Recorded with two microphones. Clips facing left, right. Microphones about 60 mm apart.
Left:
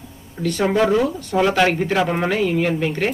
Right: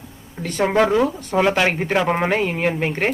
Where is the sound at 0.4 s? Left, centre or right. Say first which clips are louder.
Even; right.